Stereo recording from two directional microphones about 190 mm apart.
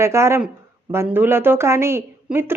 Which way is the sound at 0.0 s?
15° right (ahead or behind).